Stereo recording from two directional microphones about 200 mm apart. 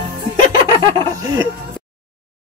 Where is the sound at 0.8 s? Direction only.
15° right (ahead or behind).